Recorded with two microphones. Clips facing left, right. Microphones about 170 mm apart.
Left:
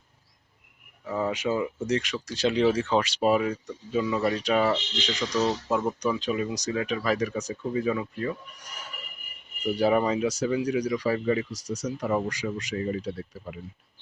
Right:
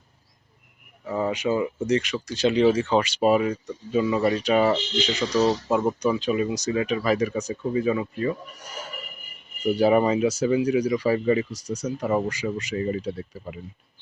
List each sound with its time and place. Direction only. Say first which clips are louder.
1.0 s speech: right 2 dB; 10° right (ahead or behind)
1.3 s speech: right 4 dB; centre (ahead or behind)
5.4 s speech: right 5 dB; 35° right (ahead or behind)
6.0 s speech: right 4 dB; 5° right (ahead or behind)
9.7 s speech: right 4 dB; 5° right (ahead or behind)